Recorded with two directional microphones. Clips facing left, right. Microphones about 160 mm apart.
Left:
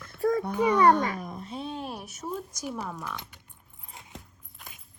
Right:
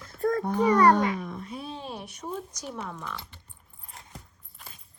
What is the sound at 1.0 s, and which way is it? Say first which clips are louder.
Speech: right 3 dB; 45° left (ahead or behind).